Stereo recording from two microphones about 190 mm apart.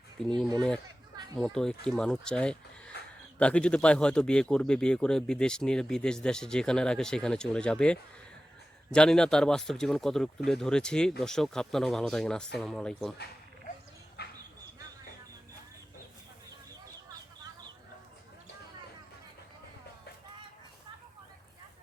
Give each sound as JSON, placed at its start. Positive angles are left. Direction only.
{"t": 1.5, "sound": "speech", "side_deg": 5}
{"t": 14.2, "sound": "dog", "side_deg": 60}